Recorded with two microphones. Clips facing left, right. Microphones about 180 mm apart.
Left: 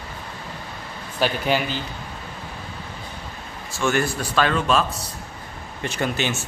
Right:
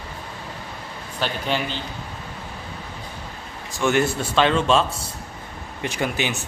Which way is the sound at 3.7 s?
20° right (ahead or behind).